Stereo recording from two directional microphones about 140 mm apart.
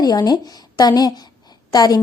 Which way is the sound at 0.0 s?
30° left (ahead or behind).